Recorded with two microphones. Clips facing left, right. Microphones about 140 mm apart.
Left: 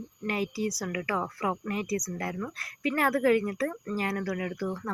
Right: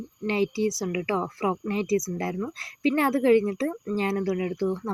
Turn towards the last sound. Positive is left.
turn(degrees=-25)  # may be behind; listen again after turning